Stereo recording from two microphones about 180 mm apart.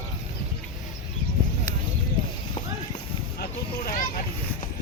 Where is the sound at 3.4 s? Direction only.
50° left (ahead or behind).